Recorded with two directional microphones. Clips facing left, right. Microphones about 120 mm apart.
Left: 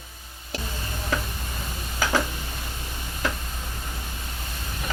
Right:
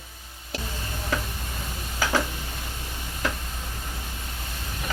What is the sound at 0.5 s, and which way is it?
Tick-tock, 20° left (ahead or behind).